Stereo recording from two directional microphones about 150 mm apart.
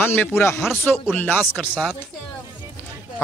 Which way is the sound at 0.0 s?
15° left (ahead or behind).